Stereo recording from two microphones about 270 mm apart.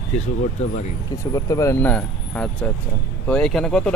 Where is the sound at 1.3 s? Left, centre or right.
Centre.